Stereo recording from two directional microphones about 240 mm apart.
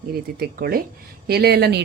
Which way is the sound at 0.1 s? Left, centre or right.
Right.